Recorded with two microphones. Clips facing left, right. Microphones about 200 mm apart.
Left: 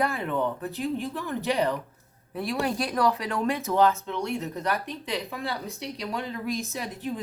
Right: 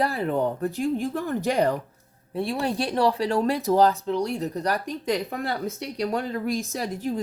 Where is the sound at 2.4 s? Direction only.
25° right (ahead or behind).